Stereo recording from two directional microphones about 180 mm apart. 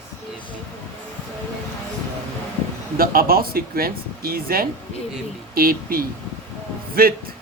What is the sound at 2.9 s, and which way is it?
Speech, 55° right (ahead or behind).